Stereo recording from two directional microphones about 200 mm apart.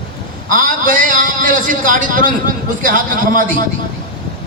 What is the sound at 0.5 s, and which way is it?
A man's voice, 40° right (ahead or behind).